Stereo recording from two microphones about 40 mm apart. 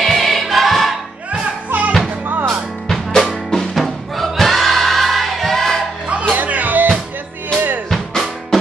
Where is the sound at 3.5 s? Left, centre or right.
Centre.